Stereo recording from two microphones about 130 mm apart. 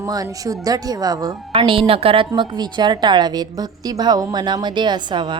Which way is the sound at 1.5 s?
40° right (ahead or behind).